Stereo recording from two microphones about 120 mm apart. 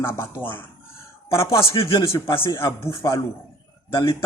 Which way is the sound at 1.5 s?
45° left (ahead or behind).